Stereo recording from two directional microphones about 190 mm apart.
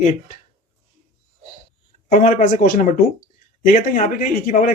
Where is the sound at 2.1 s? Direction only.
40° left (ahead or behind).